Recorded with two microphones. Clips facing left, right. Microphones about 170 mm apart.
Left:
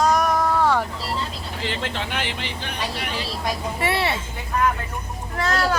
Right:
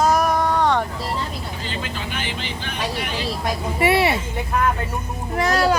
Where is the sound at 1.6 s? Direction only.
75° left (ahead or behind).